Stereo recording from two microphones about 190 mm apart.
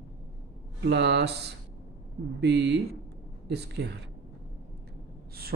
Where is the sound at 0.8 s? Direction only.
65° right (ahead or behind).